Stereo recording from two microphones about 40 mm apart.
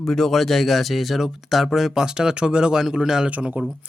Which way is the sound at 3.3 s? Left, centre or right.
Right.